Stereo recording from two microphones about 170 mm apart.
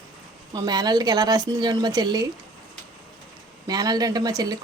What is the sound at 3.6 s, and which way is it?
Speech, 20° right (ahead or behind).